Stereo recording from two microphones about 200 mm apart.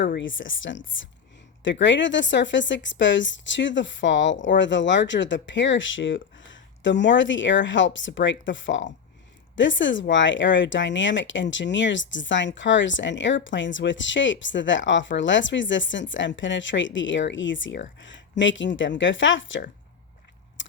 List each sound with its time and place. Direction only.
0.0 s speech: 65° left (ahead or behind)
20.6 s biting: 65° left (ahead or behind)